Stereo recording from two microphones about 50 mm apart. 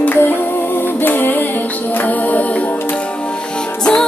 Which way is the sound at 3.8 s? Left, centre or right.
Left.